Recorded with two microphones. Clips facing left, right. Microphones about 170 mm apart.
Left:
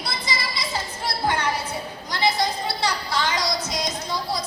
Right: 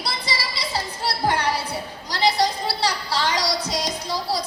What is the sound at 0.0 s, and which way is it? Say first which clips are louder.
Music: right 1 dB; 35° right (ahead or behind).